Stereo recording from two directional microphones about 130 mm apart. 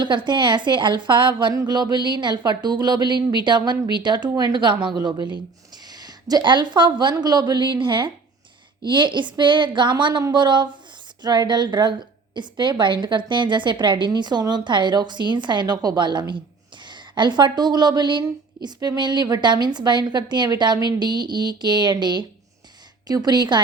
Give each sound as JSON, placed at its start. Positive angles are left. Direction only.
{"t": 0.0, "sound": "a woman's voice", "side_deg": -35}